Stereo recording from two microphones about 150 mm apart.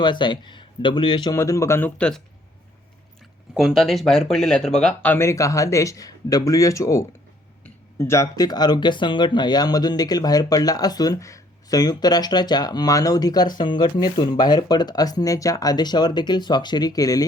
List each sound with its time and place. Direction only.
0.0 s speech: 30° left (ahead or behind)
1.4 s speech: 20° left (ahead or behind)
3.5 s speech: 5° right (ahead or behind); by 17.2 s 25° left (ahead or behind)